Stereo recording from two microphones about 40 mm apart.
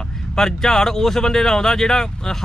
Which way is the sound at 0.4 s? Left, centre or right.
Centre.